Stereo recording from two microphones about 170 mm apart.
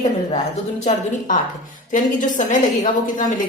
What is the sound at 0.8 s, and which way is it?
A woman's voice, 45° left (ahead or behind).